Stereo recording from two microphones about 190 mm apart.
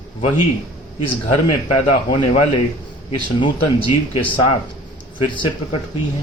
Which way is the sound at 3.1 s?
25° left (ahead or behind).